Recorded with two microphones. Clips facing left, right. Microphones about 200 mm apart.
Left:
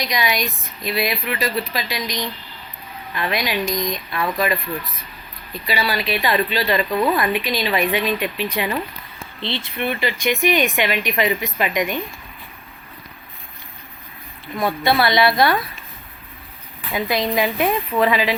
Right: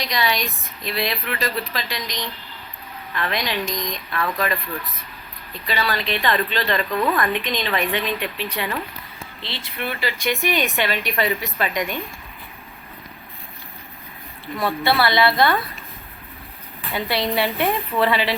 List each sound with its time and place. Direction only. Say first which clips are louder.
0.1 s speech: left 1 dB; 15° left (ahead or behind)
5.6 s speech: left 2 dB; 10° left (ahead or behind)
14.5 s speech: left 2 dB; 15° left (ahead or behind)
16.9 s speech: left 2 dB; 15° left (ahead or behind)